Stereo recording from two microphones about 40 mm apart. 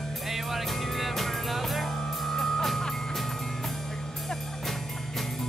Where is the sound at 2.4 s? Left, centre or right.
Centre.